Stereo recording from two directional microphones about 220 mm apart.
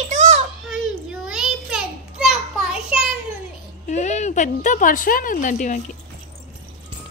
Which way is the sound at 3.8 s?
30° left (ahead or behind).